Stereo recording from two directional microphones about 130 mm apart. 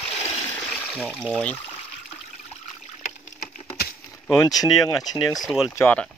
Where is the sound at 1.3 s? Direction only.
10° left (ahead or behind).